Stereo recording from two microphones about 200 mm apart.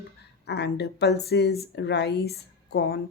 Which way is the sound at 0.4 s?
55° left (ahead or behind).